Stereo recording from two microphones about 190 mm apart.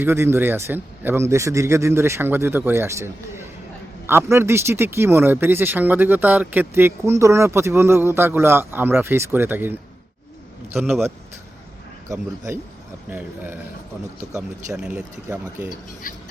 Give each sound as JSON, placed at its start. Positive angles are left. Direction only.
{"t": 0.0, "sound": "speech", "side_deg": -10}
{"t": 14.8, "sound": "speech", "side_deg": -5}
{"t": 16.1, "sound": "speech", "side_deg": 45}